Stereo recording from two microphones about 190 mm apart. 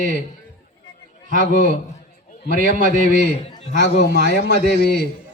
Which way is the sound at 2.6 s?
45° right (ahead or behind).